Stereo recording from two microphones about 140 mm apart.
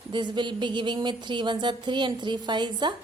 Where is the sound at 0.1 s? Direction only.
35° right (ahead or behind).